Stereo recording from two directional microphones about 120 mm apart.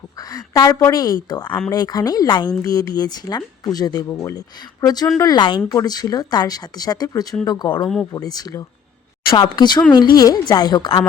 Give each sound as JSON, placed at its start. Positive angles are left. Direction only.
{"t": 0.2, "sound": "speech", "side_deg": 30}